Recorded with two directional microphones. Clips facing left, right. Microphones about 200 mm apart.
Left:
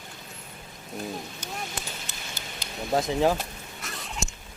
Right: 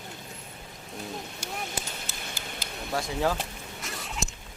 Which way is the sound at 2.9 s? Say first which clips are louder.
Left 5 dB; 20° left (ahead or behind).